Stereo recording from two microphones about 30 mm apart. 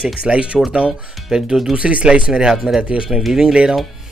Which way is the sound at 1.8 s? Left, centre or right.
Right.